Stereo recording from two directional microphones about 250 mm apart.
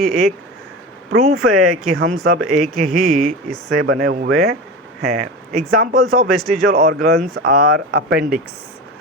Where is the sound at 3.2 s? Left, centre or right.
Centre.